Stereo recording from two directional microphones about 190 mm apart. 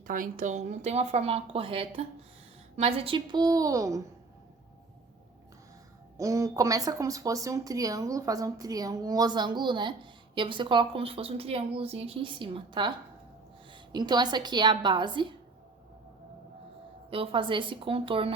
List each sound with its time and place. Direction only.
0.1 s speech: 45° right (ahead or behind); by 4.0 s 15° right (ahead or behind)
6.1 s speech: 15° right (ahead or behind)
13.9 s speech: 20° right (ahead or behind)
17.1 s speech: 30° right (ahead or behind)